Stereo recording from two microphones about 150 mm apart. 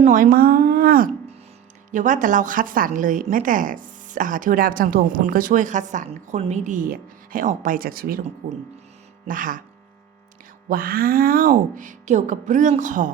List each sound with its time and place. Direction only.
0.1 s speech: 70° right (ahead or behind)
1.9 s a woman's voice: 55° right (ahead or behind); by 8.2 s 80° right
8.4 s a woman's voice: 70° right (ahead or behind)
10.7 s a woman's voice: 70° right (ahead or behind)